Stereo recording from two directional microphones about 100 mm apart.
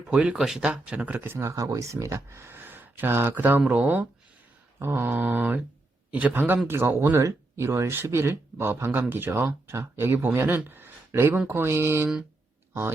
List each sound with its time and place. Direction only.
0.1 s speech: 10° right (ahead or behind)
10.7 s a sound: 20° right (ahead or behind)
11.3 s speech: 20° right (ahead or behind)